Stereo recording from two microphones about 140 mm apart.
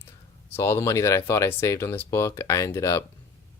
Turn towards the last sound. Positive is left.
turn(degrees=20)  # may be behind; listen again after turning